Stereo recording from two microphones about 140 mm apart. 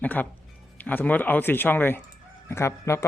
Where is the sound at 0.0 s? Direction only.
10° left (ahead or behind).